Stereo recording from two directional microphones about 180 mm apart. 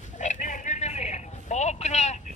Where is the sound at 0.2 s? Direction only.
45° left (ahead or behind).